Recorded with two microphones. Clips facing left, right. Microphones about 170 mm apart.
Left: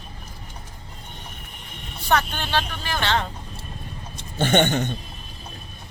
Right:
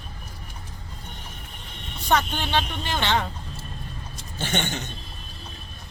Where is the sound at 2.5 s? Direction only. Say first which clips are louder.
Left 1 dB; 20° right (ahead or behind).